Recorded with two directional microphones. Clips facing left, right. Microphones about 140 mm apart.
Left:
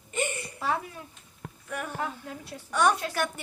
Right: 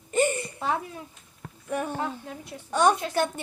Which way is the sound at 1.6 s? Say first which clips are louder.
Right 4 dB; 25° right (ahead or behind).